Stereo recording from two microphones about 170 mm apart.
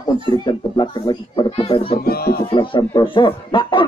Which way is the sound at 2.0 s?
65° left (ahead or behind).